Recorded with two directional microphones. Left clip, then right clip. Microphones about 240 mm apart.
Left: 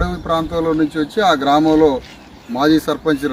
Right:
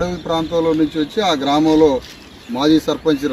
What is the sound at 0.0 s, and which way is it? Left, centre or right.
Speech, centre.